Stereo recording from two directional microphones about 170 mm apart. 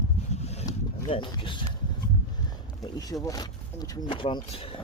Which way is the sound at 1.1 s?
30° left (ahead or behind).